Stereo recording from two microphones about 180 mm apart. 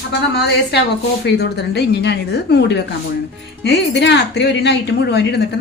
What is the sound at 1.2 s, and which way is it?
Speech, 70° left (ahead or behind).